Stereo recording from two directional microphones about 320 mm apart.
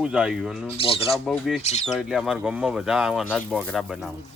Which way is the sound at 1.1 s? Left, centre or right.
Centre.